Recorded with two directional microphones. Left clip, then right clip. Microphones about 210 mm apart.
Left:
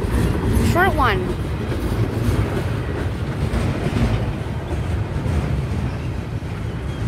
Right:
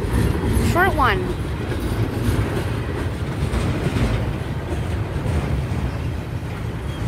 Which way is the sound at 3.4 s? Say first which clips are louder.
Even; 50° right (ahead or behind).